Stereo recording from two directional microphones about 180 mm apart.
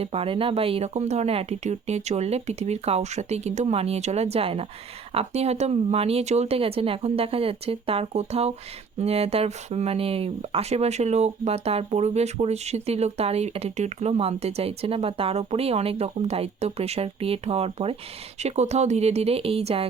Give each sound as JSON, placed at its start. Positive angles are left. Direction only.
{"t": 0.0, "sound": "speech", "side_deg": -30}